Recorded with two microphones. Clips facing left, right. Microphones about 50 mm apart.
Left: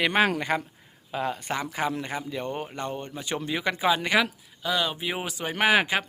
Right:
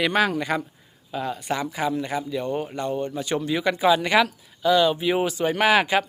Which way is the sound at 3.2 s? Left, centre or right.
Centre.